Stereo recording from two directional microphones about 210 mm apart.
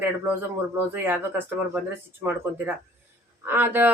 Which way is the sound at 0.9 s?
10° right (ahead or behind).